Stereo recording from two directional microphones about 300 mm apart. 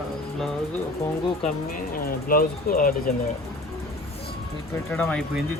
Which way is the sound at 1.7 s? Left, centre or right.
Left.